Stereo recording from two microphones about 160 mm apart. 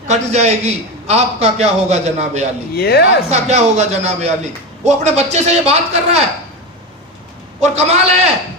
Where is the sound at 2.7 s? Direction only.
90° left.